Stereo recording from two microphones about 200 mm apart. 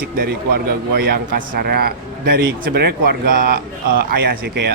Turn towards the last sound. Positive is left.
turn(degrees=-55)  # may be behind; listen again after turning